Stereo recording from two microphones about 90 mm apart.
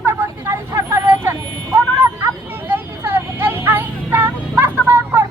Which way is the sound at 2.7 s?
25° right (ahead or behind).